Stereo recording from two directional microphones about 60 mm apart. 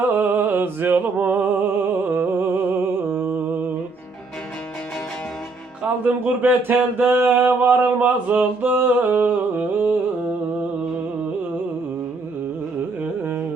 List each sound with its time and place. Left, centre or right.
0.1 s music: right
6.0 s a sound: right
13.0 s carnatic music: right